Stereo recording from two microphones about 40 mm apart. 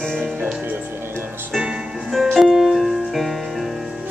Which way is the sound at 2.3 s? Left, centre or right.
Centre.